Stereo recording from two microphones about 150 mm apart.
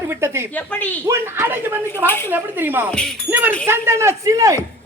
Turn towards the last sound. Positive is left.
turn(degrees=-20)  # may be behind; listen again after turning